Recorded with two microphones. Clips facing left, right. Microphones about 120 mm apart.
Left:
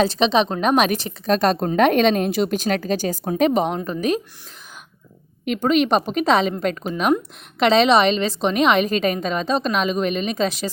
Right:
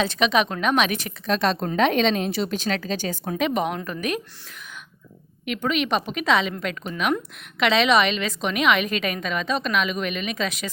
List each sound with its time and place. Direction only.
0.0 s a woman's voice: 30° left (ahead or behind)
3.8 s a woman's voice: 20° left (ahead or behind)
5.5 s a woman's voice: 40° left (ahead or behind)